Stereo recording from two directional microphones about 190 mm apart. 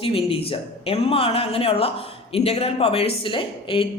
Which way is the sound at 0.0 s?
30° left (ahead or behind).